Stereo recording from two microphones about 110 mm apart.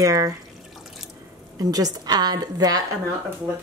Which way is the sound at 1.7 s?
35° right (ahead or behind).